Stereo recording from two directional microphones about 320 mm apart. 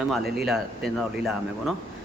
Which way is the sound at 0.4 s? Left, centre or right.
Centre.